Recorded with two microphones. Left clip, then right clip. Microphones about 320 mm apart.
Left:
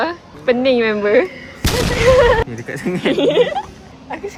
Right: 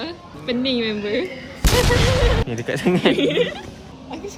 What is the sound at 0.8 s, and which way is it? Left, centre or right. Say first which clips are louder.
Speech: left 9 dB; centre.